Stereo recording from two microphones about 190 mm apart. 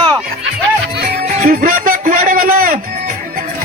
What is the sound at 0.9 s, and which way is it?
Music, 50° right (ahead or behind).